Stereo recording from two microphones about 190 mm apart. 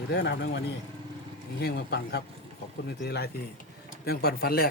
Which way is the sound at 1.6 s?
55° left (ahead or behind).